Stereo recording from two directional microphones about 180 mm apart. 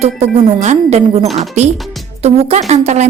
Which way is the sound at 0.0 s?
35° right (ahead or behind).